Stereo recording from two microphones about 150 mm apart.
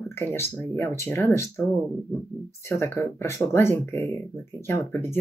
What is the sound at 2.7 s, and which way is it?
Speech, 15° left (ahead or behind).